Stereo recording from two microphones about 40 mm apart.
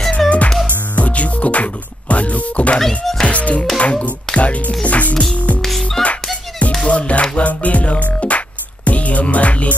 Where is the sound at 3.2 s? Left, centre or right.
Left.